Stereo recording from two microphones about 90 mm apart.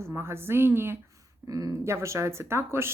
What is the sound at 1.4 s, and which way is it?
Speech, 40° right (ahead or behind).